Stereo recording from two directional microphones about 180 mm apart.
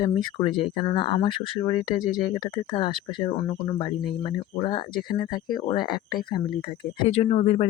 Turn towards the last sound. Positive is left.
turn(degrees=35)  # may be behind; listen again after turning